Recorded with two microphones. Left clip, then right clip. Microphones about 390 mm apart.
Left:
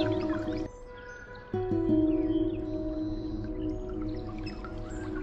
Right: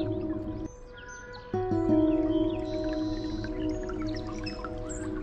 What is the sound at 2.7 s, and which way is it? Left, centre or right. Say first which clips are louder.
Music: right 3 dB; right.